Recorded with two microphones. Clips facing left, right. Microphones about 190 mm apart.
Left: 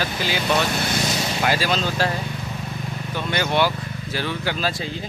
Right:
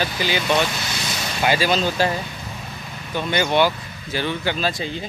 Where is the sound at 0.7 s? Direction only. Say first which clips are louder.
Left 6 dB; 55° left (ahead or behind).